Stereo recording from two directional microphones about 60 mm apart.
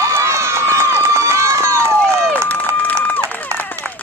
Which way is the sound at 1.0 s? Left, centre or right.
Right.